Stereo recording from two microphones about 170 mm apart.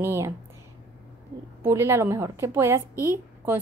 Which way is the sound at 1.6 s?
15° right (ahead or behind).